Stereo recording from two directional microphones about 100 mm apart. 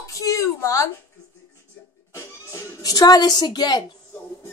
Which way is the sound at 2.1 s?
35° left (ahead or behind).